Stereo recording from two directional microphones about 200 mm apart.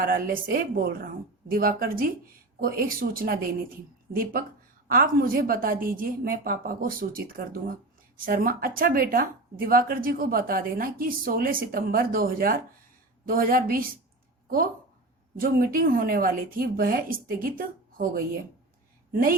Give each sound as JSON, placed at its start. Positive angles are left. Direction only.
{"t": 0.0, "sound": "speech", "side_deg": -45}
{"t": 15.4, "sound": "speech", "side_deg": -45}